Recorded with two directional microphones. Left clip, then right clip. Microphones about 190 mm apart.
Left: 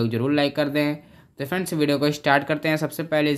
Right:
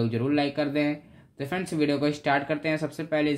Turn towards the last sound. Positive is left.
turn(degrees=25)  # may be behind; listen again after turning